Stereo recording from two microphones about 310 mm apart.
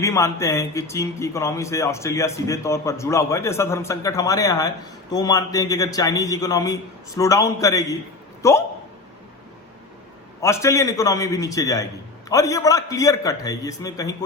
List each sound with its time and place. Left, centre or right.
0.0 s speech: centre
10.4 s speech: centre